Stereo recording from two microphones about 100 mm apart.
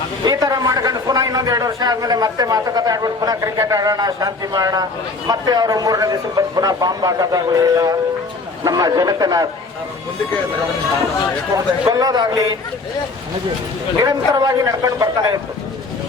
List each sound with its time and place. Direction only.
0.3 s a man's voice: 40° right (ahead or behind)
11.5 s a man's voice: 40° right (ahead or behind)
14.0 s a man's voice: 40° right (ahead or behind)